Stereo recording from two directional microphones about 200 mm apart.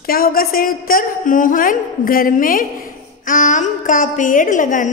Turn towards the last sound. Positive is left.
turn(degrees=40)  # may be behind; listen again after turning